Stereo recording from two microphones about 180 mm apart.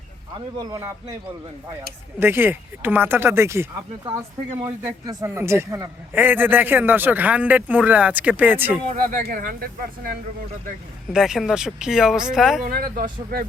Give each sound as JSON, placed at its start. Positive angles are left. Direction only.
{"t": 0.3, "sound": "a man's voice", "side_deg": -20}
{"t": 2.1, "sound": "a man's voice", "side_deg": -10}
{"t": 9.0, "sound": "speech", "side_deg": -50}
{"t": 11.1, "sound": "speech", "side_deg": 0}
{"t": 12.6, "sound": "speech", "side_deg": -55}